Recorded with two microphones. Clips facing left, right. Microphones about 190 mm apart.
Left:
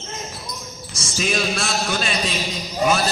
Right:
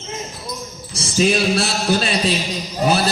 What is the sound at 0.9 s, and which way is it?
A man's voice, 35° right (ahead or behind).